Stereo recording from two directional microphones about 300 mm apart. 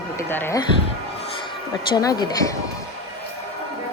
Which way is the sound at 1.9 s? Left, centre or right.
Centre.